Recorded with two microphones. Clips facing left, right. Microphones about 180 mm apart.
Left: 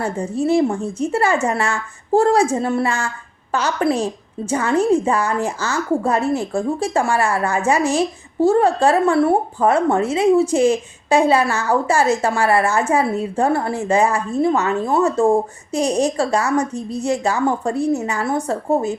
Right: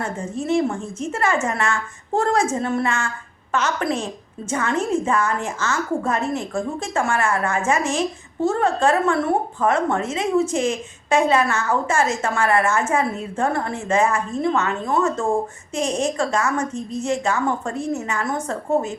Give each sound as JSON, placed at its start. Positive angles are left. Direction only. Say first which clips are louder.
{"t": 0.0, "sound": "a woman's voice", "louder": "left 6 dB", "side_deg": 35}